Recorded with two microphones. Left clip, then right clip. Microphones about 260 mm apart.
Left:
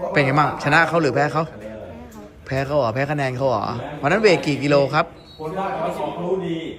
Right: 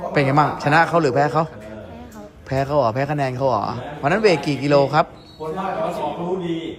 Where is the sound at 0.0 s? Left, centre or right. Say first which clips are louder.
Even; centre.